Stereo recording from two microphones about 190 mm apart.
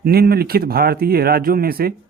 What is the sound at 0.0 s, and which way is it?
Speech, 55° right (ahead or behind).